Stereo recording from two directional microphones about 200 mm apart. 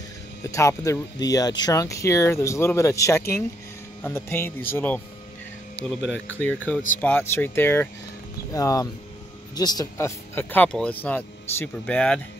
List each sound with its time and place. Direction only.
0.5 s speech: 15° left (ahead or behind)